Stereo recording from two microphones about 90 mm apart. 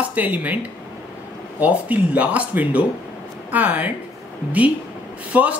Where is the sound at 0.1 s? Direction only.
20° right (ahead or behind).